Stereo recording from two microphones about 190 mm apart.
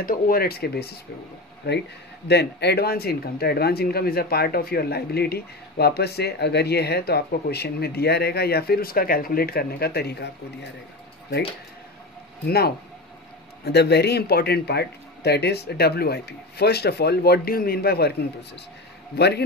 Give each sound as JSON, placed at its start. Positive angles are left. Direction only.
{"t": 0.0, "sound": "speech", "side_deg": 50}
{"t": 12.4, "sound": "speech", "side_deg": 55}
{"t": 19.1, "sound": "speech", "side_deg": 60}